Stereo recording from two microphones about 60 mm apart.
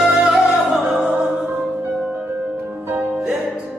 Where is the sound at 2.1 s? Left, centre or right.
Right.